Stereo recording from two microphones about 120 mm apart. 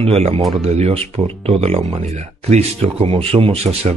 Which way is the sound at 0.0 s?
55° right (ahead or behind).